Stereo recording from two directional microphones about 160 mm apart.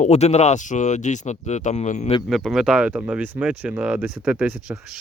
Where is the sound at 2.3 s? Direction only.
Centre (ahead or behind).